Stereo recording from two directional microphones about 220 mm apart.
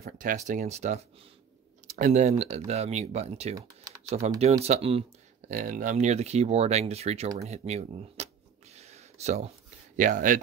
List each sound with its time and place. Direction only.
0.0 s speech: 40° right (ahead or behind)
3.5 s typing: 15° right (ahead or behind)
4.4 s speech: 30° right (ahead or behind)
5.5 s speech: 35° right (ahead or behind)
7.4 s a sound: 30° right (ahead or behind)
9.9 s speech: 35° right (ahead or behind)